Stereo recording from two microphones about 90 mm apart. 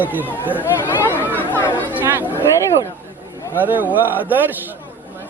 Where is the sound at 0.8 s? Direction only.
25° left (ahead or behind).